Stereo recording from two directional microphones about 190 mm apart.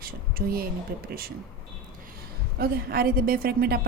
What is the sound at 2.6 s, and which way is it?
A woman's voice, 50° right (ahead or behind).